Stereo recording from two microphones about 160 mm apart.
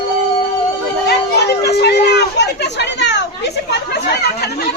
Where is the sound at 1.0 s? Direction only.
90° left.